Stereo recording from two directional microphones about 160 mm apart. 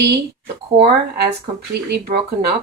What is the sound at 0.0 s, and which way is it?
Speech, 90° right.